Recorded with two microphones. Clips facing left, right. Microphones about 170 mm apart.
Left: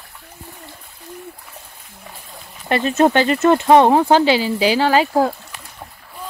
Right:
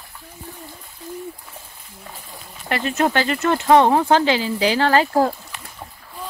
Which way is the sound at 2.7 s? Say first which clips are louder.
Left 5 dB; 25° left (ahead or behind).